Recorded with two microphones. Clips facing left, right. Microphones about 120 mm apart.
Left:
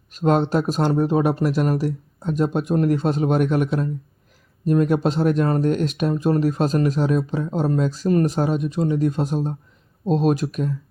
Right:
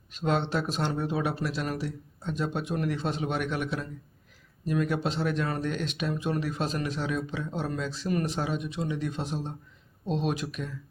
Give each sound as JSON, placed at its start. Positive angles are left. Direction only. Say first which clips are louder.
{"t": 0.1, "sound": "speech", "louder": "left 9 dB", "side_deg": 45}